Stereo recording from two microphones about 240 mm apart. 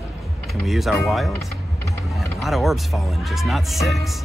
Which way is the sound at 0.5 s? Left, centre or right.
Centre.